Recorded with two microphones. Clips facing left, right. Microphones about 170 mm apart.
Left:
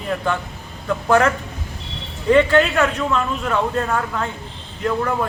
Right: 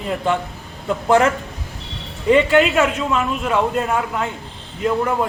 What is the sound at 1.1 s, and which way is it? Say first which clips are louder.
A man's voice: right 1 dB; 20° right (ahead or behind).